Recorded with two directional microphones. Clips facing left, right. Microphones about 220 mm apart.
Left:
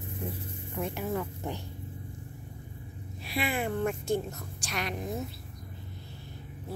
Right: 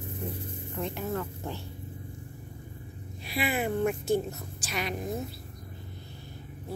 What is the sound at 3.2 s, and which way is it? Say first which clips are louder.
Speech: right 2 dB; centre (ahead or behind).